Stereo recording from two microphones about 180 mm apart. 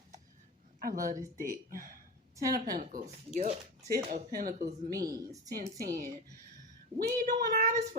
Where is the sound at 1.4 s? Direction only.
50° right (ahead or behind).